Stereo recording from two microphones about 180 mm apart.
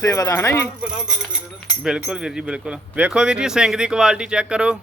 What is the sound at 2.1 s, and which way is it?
Speech, 5° right (ahead or behind).